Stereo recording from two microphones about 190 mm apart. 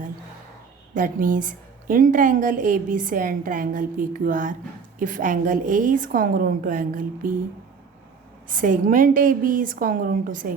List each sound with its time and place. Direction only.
0.9 s a woman's voice: 45° right (ahead or behind)
8.4 s a woman's voice: 45° right (ahead or behind)